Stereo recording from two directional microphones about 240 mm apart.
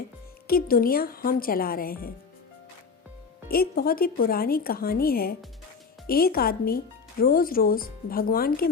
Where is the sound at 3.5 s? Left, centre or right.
Left.